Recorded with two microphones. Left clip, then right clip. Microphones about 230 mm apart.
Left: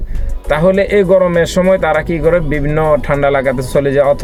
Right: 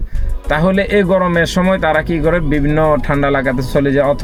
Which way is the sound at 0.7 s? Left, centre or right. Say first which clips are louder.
Left 3 dB; centre.